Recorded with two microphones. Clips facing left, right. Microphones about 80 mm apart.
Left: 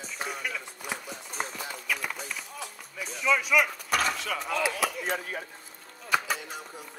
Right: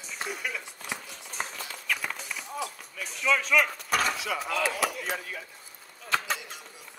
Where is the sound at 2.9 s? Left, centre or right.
Centre.